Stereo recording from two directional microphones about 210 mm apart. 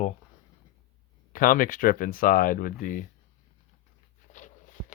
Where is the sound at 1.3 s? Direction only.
40° left (ahead or behind).